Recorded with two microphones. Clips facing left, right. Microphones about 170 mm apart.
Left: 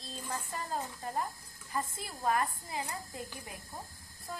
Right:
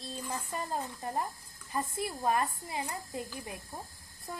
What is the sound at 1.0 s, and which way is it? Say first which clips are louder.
A woman's voice: right 1 dB; 20° right (ahead or behind).